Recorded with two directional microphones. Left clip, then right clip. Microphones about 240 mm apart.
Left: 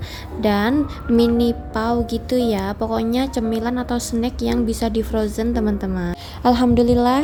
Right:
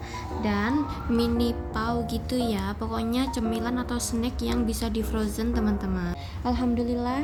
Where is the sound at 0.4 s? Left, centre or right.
Left.